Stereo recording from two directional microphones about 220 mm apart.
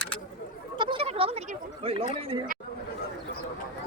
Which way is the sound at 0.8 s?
25° right (ahead or behind).